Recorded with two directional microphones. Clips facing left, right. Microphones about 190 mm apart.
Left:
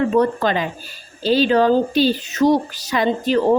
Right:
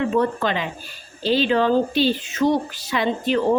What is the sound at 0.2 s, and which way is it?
Speech, 40° left (ahead or behind).